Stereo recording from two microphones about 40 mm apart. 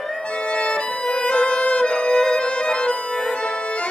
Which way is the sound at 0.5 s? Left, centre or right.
Left.